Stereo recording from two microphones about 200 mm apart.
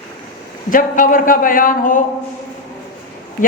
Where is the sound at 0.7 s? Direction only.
40° left (ahead or behind).